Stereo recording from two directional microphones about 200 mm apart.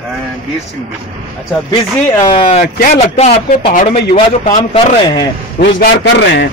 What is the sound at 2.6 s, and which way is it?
A man's voice, 40° left (ahead or behind).